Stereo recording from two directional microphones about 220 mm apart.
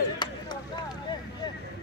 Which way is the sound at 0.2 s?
20° left (ahead or behind).